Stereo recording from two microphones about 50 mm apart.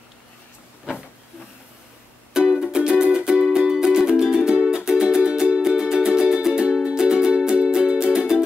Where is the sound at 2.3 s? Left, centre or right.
Centre.